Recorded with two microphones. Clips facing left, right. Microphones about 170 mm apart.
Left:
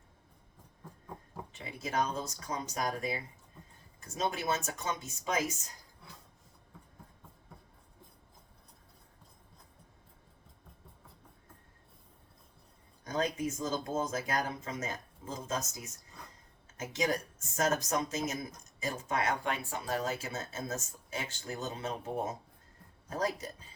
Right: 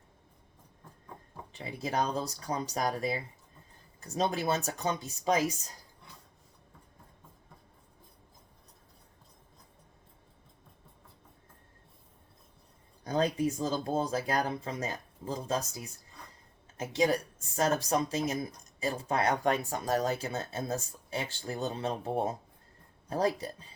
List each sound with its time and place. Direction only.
1.5 s speech: 35° right (ahead or behind)
13.1 s speech: 35° right (ahead or behind)